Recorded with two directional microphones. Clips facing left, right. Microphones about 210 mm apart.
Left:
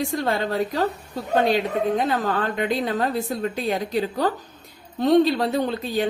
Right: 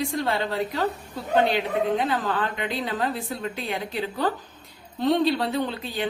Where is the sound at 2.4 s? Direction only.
45° left (ahead or behind).